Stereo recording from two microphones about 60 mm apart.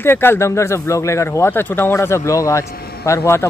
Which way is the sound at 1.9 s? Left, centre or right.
Left.